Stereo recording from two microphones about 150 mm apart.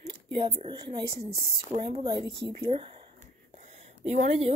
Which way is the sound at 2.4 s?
40° right (ahead or behind).